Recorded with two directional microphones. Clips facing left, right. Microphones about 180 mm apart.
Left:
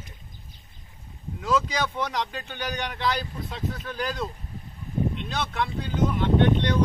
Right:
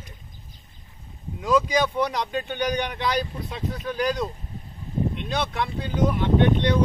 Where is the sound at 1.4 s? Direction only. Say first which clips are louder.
Right 4 dB; 15° right (ahead or behind).